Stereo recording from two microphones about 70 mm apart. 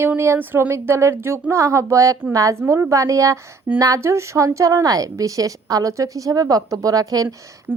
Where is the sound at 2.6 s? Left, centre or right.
Right.